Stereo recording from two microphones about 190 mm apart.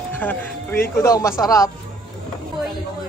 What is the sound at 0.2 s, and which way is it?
A man's voice, 10° left (ahead or behind).